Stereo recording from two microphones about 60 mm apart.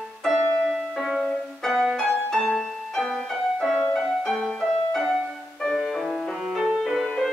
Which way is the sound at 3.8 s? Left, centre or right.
Centre.